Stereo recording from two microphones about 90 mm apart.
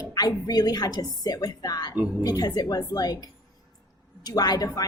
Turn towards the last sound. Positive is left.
turn(degrees=45)  # may be behind; listen again after turning